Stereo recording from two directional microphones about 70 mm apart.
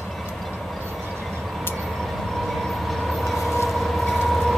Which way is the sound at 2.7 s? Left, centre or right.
Centre.